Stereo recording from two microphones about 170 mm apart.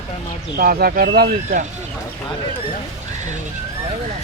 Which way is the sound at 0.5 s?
60° right (ahead or behind).